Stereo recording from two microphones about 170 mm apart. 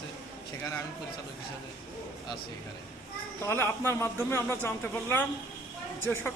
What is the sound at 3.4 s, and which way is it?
A man's voice, 15° left (ahead or behind).